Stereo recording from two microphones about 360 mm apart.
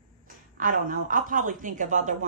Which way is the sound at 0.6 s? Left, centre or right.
Right.